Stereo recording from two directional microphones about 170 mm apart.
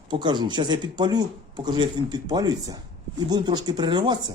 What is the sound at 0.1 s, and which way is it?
Speech, 25° right (ahead or behind).